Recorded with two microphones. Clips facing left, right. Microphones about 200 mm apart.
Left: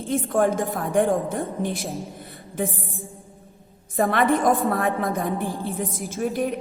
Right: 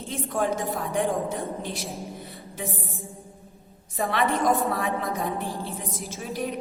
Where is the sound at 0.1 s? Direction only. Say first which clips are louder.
Left 6 dB; 50° left (ahead or behind).